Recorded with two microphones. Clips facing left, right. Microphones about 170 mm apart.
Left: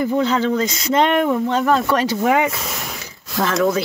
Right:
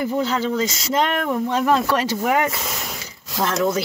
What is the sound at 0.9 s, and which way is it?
Speech, centre (ahead or behind).